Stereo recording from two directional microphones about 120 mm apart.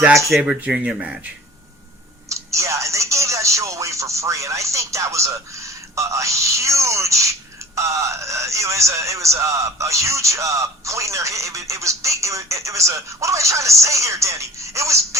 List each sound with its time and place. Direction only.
0.3 s speech: 5° right (ahead or behind)
2.3 s a man's voice: 25° right (ahead or behind)